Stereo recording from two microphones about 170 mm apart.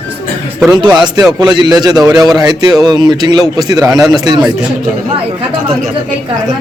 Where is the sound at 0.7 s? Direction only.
25° right (ahead or behind).